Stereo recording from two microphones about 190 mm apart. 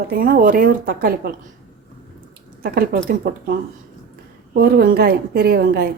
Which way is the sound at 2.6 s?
50° right (ahead or behind).